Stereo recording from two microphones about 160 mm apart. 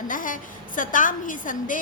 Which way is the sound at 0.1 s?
55° left (ahead or behind).